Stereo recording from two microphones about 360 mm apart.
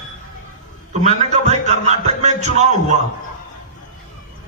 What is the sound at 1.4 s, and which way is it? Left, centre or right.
A man's voice, centre.